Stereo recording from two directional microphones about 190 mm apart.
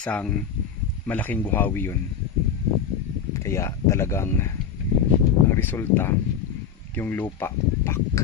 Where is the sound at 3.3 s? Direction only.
15° left (ahead or behind).